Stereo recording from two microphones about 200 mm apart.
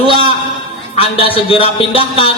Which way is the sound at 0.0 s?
25° left (ahead or behind).